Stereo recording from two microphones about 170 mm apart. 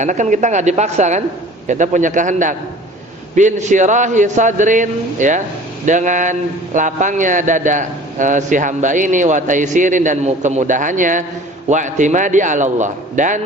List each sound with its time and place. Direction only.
0.0 s a man's voice: 45° right (ahead or behind)